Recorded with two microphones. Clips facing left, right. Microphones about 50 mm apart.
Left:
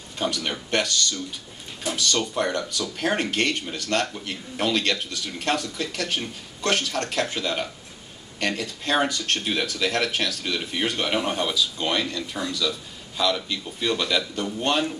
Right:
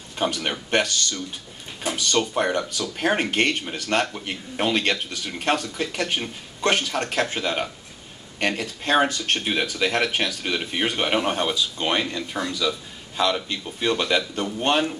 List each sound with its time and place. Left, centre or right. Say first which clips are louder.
0.2 s speech: right 2 dB; right